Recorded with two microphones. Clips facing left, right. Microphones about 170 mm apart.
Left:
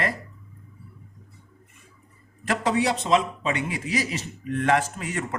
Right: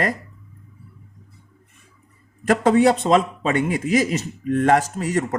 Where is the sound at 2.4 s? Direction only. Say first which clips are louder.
Right 8 dB; 45° right (ahead or behind).